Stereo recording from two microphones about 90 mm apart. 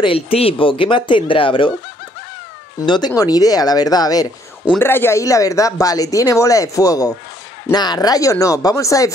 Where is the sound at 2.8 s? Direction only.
55° left (ahead or behind).